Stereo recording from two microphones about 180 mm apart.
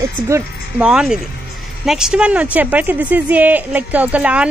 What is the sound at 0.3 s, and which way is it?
A woman's voice, 5° right (ahead or behind).